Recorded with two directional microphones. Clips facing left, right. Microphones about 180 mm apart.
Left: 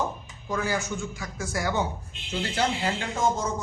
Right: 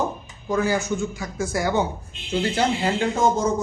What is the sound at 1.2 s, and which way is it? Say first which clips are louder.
A man's voice: right 6 dB; 20° right (ahead or behind).